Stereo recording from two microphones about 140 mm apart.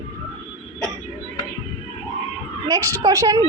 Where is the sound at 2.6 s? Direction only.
25° right (ahead or behind).